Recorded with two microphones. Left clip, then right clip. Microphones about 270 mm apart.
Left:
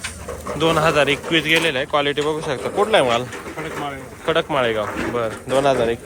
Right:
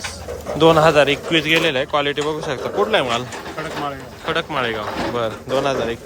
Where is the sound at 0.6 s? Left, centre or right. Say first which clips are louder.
Right 4 dB; centre.